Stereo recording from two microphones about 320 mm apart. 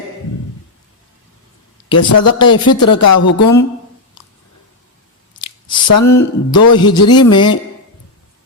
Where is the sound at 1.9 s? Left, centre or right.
Left.